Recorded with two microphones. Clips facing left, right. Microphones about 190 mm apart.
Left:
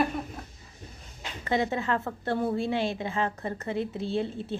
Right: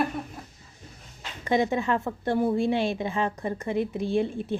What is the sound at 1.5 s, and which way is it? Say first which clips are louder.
A woman's voice: right 3 dB; 20° right (ahead or behind).